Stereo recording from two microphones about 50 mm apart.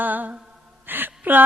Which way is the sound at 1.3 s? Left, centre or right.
Right.